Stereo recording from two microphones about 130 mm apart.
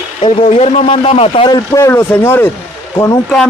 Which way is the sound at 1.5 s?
30° left (ahead or behind).